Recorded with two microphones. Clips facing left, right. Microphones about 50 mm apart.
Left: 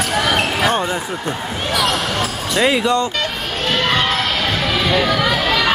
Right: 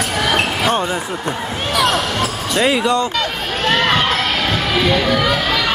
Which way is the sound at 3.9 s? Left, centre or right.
Centre.